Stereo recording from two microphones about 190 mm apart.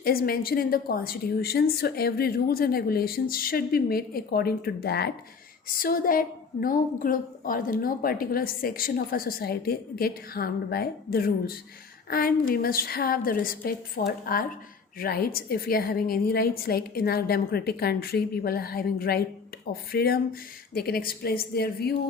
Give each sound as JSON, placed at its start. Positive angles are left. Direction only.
{"t": 0.0, "sound": "a woman's voice", "side_deg": 50}